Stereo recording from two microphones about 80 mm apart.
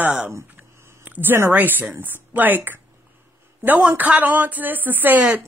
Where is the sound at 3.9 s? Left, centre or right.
Right.